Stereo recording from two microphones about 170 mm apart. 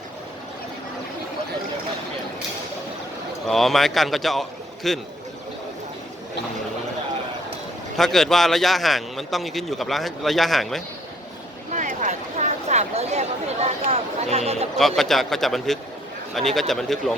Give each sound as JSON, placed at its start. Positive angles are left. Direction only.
{"t": 3.4, "sound": "a man's voice", "side_deg": 0}
{"t": 7.9, "sound": "a man's voice", "side_deg": 0}
{"t": 11.7, "sound": "a sound", "side_deg": -45}
{"t": 13.9, "sound": "speech", "side_deg": -40}
{"t": 14.8, "sound": "a man's voice", "side_deg": 0}